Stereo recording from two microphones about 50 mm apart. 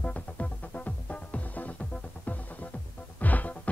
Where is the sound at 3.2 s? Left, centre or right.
Left.